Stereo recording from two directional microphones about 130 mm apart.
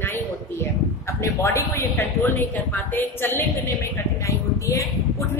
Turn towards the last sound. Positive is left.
turn(degrees=25)  # may be behind; listen again after turning